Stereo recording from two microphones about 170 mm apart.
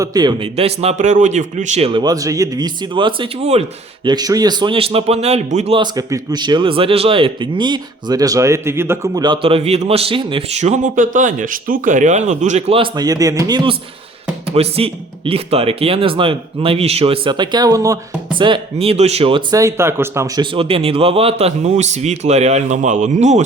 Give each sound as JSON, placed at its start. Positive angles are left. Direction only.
{"t": 0.0, "sound": "speech", "side_deg": -20}
{"t": 0.5, "sound": "speech", "side_deg": -35}
{"t": 1.9, "sound": "speech", "side_deg": -25}
{"t": 4.0, "sound": "a man's voice", "side_deg": -25}
{"t": 5.8, "sound": "speech", "side_deg": -25}
{"t": 9.2, "sound": "a man's voice", "side_deg": -30}
{"t": 14.5, "sound": "a man's voice", "side_deg": -35}
{"t": 19.5, "sound": "speech", "side_deg": -15}
{"t": 20.4, "sound": "a man's voice", "side_deg": -35}